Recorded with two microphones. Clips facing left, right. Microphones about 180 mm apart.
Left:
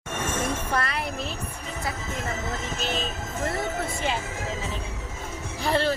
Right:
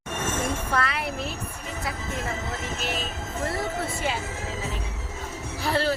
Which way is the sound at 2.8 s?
5° right (ahead or behind).